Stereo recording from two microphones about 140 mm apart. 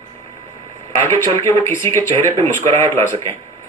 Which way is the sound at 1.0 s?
20° left (ahead or behind).